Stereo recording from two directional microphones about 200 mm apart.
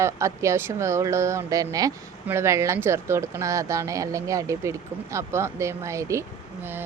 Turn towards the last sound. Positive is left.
turn(degrees=-15)  # may be behind; listen again after turning